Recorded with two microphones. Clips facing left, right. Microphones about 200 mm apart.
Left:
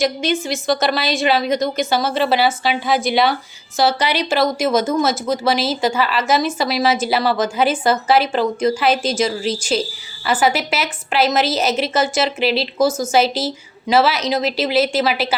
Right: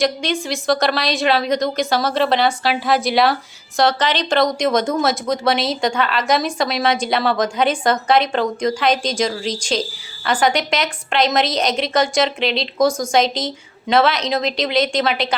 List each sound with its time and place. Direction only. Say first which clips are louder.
0.0 s speech: left 1 dB; centre (ahead or behind)